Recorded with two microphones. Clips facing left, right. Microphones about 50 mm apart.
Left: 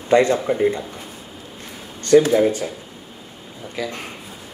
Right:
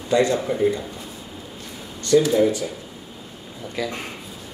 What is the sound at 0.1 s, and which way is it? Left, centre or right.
Speech, left.